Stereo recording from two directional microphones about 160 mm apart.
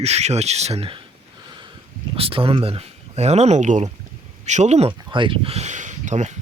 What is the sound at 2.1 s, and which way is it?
Speech, 35° right (ahead or behind).